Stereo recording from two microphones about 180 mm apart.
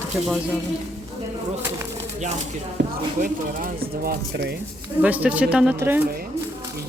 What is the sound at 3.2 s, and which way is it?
Speech, 50° right (ahead or behind).